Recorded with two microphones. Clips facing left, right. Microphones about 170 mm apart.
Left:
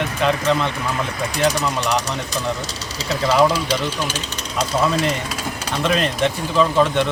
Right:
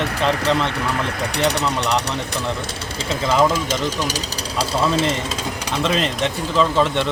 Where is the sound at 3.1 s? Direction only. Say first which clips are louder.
Left 1 dB; 25° right (ahead or behind).